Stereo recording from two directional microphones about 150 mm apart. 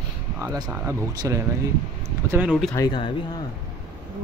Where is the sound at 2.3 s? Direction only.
5° right (ahead or behind).